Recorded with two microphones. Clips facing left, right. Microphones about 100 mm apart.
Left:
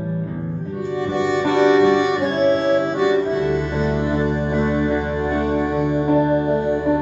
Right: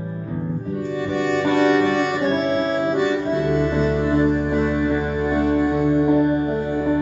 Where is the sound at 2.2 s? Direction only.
Centre (ahead or behind).